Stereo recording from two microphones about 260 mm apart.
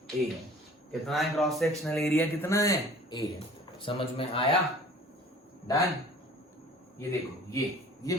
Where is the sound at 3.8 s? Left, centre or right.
Centre.